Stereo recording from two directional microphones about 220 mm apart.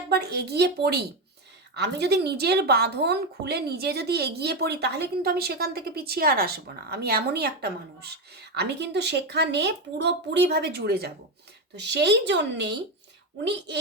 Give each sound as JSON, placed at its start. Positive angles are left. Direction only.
{"t": 0.1, "sound": "speech", "side_deg": -45}